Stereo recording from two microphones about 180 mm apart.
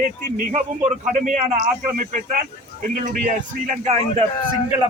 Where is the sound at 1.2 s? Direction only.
45° right (ahead or behind).